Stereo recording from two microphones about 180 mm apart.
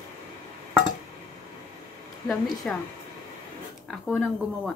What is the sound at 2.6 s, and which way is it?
Speech, 5° left (ahead or behind).